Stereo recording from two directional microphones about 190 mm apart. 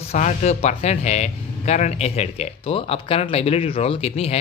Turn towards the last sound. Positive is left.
turn(degrees=35)  # may be behind; listen again after turning